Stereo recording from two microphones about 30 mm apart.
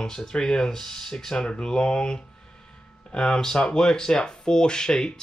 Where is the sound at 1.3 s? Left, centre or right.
Left.